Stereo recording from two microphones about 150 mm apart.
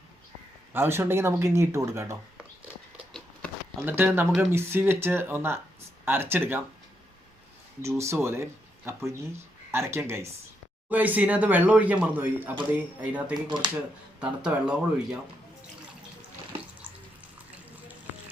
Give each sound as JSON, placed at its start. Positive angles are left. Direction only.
{"t": 0.7, "sound": "speech", "side_deg": -15}
{"t": 3.8, "sound": "speech", "side_deg": -15}
{"t": 7.8, "sound": "speech", "side_deg": -20}